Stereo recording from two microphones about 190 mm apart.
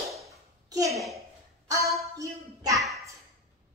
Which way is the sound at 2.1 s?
15° right (ahead or behind).